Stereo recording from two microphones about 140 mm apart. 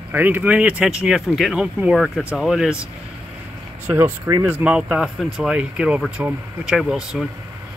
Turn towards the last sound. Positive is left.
turn(degrees=-5)  # may be behind; listen again after turning